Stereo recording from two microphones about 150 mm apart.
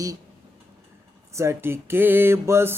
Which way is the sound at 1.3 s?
20° right (ahead or behind).